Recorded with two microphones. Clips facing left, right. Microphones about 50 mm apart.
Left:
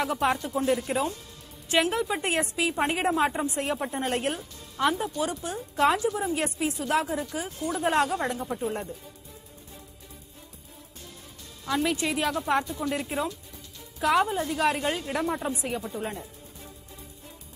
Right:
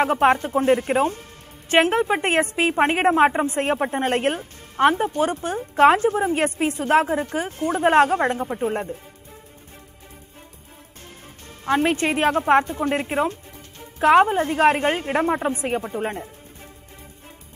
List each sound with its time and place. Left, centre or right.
0.0 s a woman's voice: right
11.6 s a woman's voice: right